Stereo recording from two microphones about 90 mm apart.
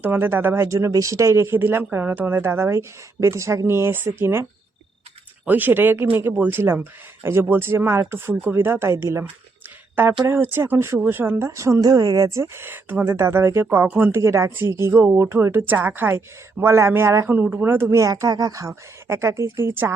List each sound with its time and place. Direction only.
0.0 s speech: 25° right (ahead or behind)
5.5 s speech: 20° right (ahead or behind)
14.1 s speech: 30° right (ahead or behind)
17.2 s speech: 20° right (ahead or behind)
18.0 s a woman's voice: 40° right (ahead or behind); by 19.9 s 25° right (ahead or behind)